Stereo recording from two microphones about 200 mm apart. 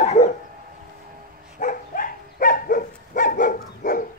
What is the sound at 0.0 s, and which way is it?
Dog, 35° left (ahead or behind).